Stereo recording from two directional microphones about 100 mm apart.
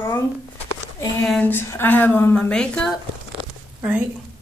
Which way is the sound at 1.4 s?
25° left (ahead or behind).